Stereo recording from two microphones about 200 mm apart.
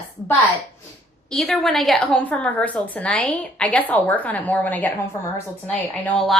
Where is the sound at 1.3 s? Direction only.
Centre (ahead or behind).